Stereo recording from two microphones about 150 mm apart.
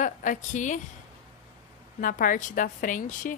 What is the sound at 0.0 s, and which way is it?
Speech, 60° left (ahead or behind).